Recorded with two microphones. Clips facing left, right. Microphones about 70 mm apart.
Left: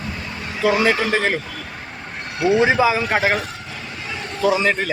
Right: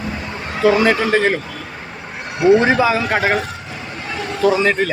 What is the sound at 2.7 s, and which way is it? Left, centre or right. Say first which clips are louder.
Speech: right 1 dB; centre.